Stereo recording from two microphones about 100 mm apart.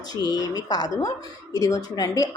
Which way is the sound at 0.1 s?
40° left (ahead or behind).